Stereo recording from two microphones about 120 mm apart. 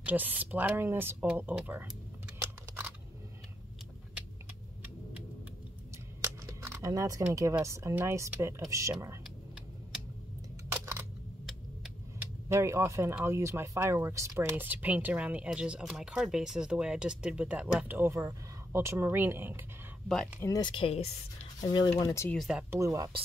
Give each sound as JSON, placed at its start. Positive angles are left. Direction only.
{"t": 0.0, "sound": "speech", "side_deg": -15}
{"t": 2.4, "sound": "a sound", "side_deg": -15}
{"t": 6.2, "sound": "a sound", "side_deg": -20}
{"t": 7.6, "sound": "speech", "side_deg": -25}
{"t": 10.7, "sound": "a sound", "side_deg": -20}
{"t": 12.4, "sound": "speech", "side_deg": -25}
{"t": 20.3, "sound": "speech", "side_deg": 30}
{"t": 20.7, "sound": "speech", "side_deg": 55}
{"t": 21.5, "sound": "speech", "side_deg": 35}
{"t": 22.7, "sound": "speech", "side_deg": -25}